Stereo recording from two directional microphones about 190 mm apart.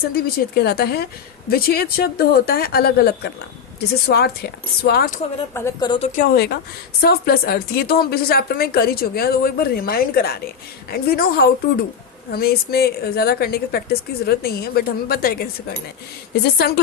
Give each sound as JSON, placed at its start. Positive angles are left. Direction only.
{"t": 0.1, "sound": "a woman's voice", "side_deg": 55}
{"t": 5.5, "sound": "a woman's voice", "side_deg": 15}
{"t": 5.9, "sound": "a woman's voice", "side_deg": 35}